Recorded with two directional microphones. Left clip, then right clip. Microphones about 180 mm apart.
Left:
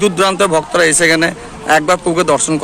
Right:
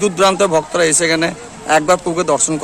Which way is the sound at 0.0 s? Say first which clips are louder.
Left 1 dB; 10° right (ahead or behind).